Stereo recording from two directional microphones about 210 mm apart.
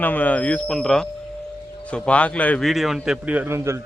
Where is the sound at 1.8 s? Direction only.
5° left (ahead or behind); by 3.8 s 10° right (ahead or behind).